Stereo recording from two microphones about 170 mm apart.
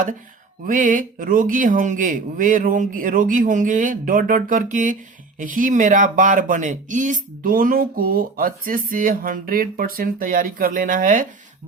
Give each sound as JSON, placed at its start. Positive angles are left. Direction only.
{"t": 0.6, "sound": "speech", "side_deg": -50}